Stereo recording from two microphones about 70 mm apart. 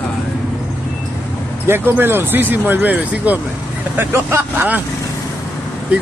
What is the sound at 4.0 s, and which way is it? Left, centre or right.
Speech, right.